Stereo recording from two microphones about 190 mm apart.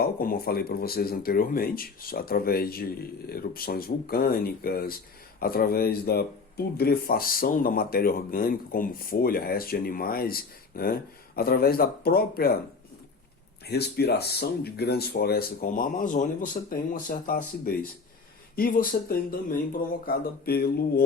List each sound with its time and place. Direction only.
0.0 s speech: 50° left (ahead or behind)
13.7 s speech: 60° left (ahead or behind)